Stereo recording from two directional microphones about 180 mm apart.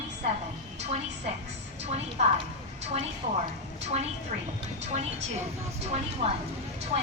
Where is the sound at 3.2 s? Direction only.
40° right (ahead or behind).